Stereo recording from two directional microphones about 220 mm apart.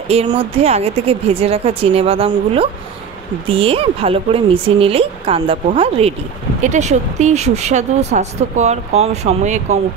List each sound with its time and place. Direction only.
0.1 s speech: 25° right (ahead or behind)